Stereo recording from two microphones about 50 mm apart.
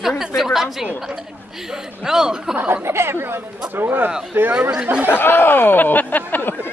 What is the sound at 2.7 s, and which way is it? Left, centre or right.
Speech, right.